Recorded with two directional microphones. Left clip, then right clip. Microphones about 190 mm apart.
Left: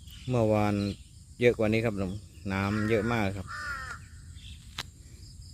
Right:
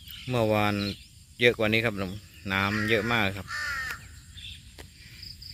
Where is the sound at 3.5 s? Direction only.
50° left (ahead or behind).